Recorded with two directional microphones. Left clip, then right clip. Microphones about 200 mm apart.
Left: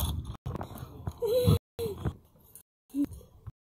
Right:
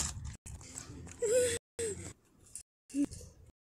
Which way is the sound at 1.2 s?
20° right (ahead or behind).